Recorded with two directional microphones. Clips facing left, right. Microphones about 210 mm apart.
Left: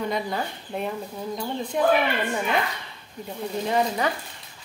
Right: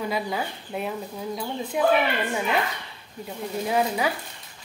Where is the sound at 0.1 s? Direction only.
5° right (ahead or behind).